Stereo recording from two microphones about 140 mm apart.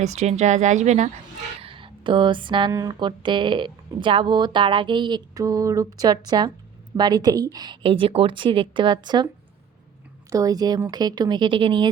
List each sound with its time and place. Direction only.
0.0 s speech: 55° right (ahead or behind)
1.6 s a sound: 40° right (ahead or behind)
2.7 s speech: 30° right (ahead or behind)
10.2 s speech: 25° right (ahead or behind)